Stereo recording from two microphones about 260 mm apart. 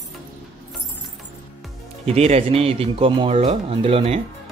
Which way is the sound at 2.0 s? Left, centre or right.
Right.